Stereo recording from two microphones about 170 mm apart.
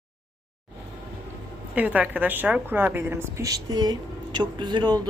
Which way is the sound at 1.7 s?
10° right (ahead or behind).